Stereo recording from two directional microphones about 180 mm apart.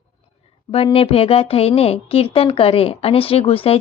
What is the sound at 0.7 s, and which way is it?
A woman's voice, 30° left (ahead or behind).